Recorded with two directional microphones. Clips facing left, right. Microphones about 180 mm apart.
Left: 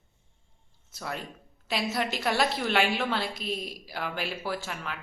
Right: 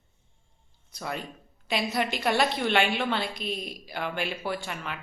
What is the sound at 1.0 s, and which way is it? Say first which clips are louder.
A woman's voice: right 2 dB; centre (ahead or behind).